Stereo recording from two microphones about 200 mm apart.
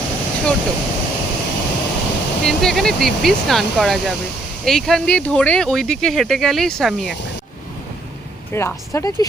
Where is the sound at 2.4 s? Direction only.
Centre (ahead or behind).